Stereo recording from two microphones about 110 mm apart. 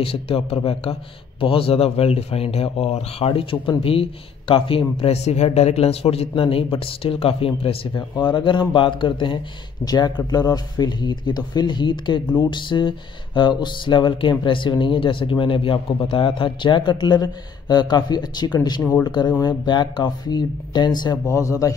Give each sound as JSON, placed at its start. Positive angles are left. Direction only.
{"t": 0.0, "sound": "speech", "side_deg": 60}
{"t": 7.9, "sound": "speech", "side_deg": 45}
{"t": 18.8, "sound": "speech", "side_deg": 15}
{"t": 19.0, "sound": "speech", "side_deg": 40}